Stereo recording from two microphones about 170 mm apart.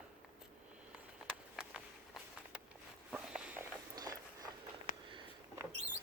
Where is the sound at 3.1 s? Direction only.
5° right (ahead or behind).